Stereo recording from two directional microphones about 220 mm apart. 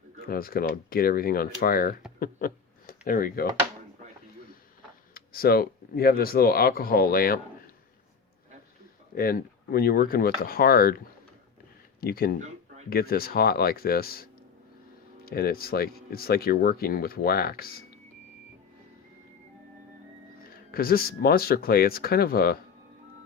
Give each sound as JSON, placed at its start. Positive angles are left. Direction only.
{"t": 0.3, "sound": "speech", "side_deg": 40}
{"t": 2.1, "sound": "a sound", "side_deg": 40}
{"t": 5.1, "sound": "speech", "side_deg": 40}
{"t": 9.1, "sound": "speech", "side_deg": 45}
{"t": 20.5, "sound": "speech", "side_deg": 45}